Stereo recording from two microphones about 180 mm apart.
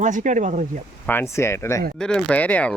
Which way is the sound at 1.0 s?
15° left (ahead or behind).